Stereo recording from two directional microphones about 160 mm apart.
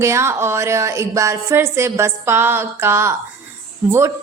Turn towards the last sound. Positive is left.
turn(degrees=-15)  # may be behind; listen again after turning